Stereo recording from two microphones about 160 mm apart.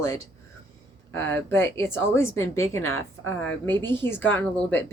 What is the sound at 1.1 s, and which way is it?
Speech, 15° left (ahead or behind).